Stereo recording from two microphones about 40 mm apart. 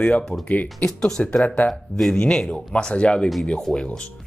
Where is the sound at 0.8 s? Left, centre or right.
Centre.